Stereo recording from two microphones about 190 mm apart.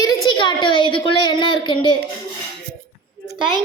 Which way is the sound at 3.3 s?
25° right (ahead or behind).